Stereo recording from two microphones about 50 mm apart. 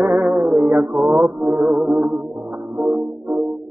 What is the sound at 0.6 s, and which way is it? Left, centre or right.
Mantra, centre.